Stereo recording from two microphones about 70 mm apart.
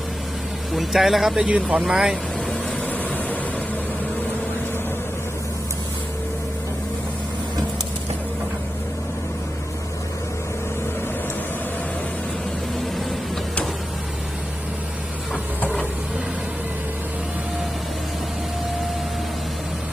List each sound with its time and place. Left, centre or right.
0.7 s speech: centre
1.5 s speech: centre
2.8 s vehicle: left
15.3 s printer: centre